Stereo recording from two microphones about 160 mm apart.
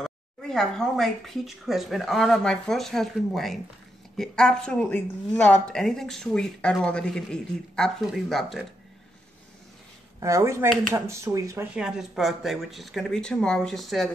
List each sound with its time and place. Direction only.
0.0 s speech: 5° left (ahead or behind)
10.2 s speech: 20° right (ahead or behind); by 14.1 s centre (ahead or behind)